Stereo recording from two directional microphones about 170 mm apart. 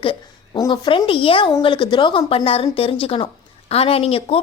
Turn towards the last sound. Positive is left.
turn(degrees=35)  # may be behind; listen again after turning